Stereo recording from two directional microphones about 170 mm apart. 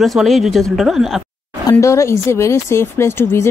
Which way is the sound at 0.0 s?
Centre (ahead or behind).